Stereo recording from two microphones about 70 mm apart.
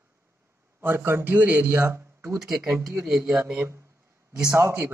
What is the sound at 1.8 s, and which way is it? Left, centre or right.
Speech, right.